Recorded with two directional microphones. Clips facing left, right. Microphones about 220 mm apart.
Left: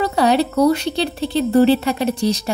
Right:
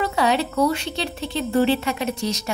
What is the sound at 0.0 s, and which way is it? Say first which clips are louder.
Speech: left 5 dB; 35° left (ahead or behind).